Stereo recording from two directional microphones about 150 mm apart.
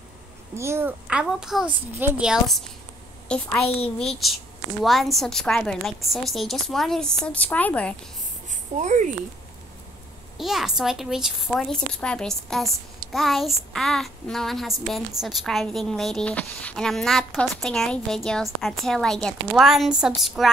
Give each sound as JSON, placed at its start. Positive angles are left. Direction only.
{"t": 0.6, "sound": "a child's voice", "side_deg": -15}
{"t": 1.0, "sound": "a child's voice", "side_deg": -5}
{"t": 3.3, "sound": "a child's voice", "side_deg": 15}
{"t": 3.6, "sound": "a child's voice", "side_deg": 40}
{"t": 4.0, "sound": "a child's voice", "side_deg": 0}
{"t": 8.7, "sound": "speech", "side_deg": -55}
{"t": 10.3, "sound": "a child's voice", "side_deg": 0}